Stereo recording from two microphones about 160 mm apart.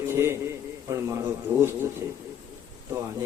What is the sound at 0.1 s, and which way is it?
A man's voice, 15° right (ahead or behind).